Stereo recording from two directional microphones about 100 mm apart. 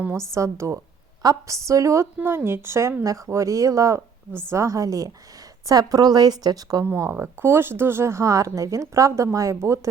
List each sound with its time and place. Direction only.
0.3 s a woman's voice: 30° right (ahead or behind)
6.8 s speech: 25° right (ahead or behind)